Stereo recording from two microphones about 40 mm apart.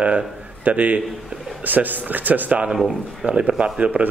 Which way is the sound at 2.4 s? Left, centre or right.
Right.